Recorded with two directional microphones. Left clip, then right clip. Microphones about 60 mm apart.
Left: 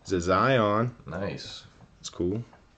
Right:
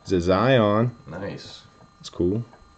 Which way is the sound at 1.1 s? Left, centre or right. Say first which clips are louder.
Even; centre.